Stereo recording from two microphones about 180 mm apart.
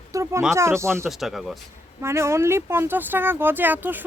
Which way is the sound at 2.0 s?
15° right (ahead or behind).